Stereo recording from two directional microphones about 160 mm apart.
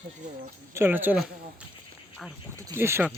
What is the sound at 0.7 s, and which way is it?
Speech, 15° right (ahead or behind).